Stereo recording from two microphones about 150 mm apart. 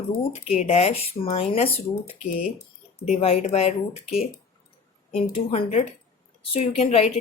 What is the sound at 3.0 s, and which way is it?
Speech, 45° left (ahead or behind).